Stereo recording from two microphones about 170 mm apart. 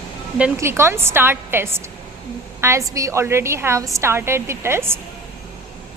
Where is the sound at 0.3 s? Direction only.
10° right (ahead or behind).